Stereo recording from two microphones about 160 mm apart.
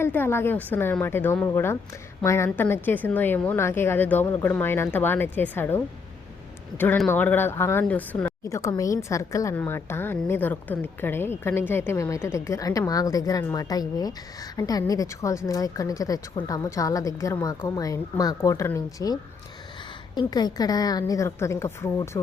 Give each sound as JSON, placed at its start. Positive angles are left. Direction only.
{"t": 0.0, "sound": "a woman's voice", "side_deg": 15}
{"t": 8.4, "sound": "a woman's voice", "side_deg": 20}